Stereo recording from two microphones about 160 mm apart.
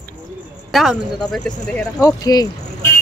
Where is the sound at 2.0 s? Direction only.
25° left (ahead or behind).